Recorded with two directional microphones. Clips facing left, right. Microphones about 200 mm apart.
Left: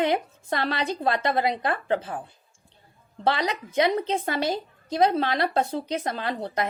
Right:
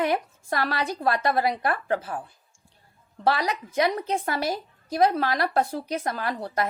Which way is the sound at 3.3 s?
25° left (ahead or behind).